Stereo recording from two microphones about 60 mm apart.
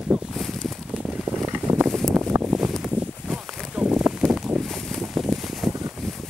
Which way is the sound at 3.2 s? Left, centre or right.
Centre.